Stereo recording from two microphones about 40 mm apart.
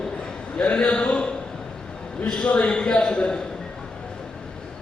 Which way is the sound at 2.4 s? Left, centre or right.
Left.